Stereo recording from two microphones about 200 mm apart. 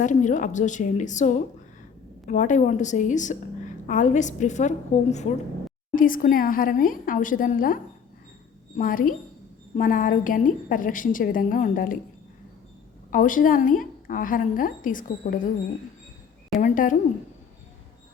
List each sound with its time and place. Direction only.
0.0 s a woman's voice: 40° left (ahead or behind)
8.8 s a woman's voice: 45° left (ahead or behind)
13.1 s a woman's voice: 40° left (ahead or behind)
16.6 s a woman's voice: 40° left (ahead or behind)